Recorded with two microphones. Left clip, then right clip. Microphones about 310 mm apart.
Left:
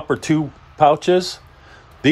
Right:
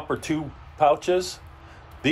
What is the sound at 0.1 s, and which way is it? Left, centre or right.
Speech, left.